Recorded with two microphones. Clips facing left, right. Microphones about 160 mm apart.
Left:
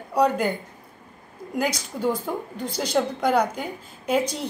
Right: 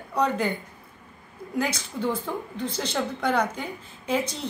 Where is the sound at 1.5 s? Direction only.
10° left (ahead or behind).